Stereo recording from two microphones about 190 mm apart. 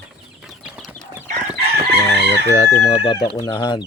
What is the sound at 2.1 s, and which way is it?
Chicken, 60° left (ahead or behind).